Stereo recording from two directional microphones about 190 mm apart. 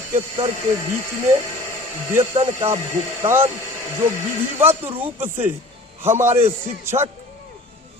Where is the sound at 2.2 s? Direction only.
25° right (ahead or behind).